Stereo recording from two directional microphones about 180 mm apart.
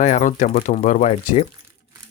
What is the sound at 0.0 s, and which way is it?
Speech, 40° left (ahead or behind).